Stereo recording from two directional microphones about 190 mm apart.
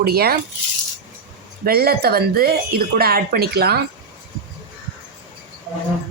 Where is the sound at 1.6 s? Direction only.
55° right (ahead or behind).